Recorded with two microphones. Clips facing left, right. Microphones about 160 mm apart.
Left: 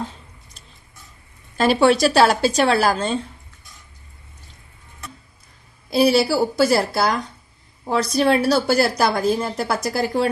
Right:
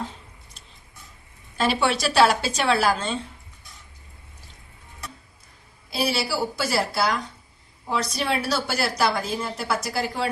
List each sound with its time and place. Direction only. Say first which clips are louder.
1.5 s a woman's voice: left 7 dB; 45° left (ahead or behind)
5.9 s a woman's voice: left 9 dB; 45° left (ahead or behind)